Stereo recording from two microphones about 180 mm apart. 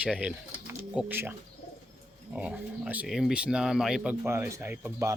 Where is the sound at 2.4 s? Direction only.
5° right (ahead or behind).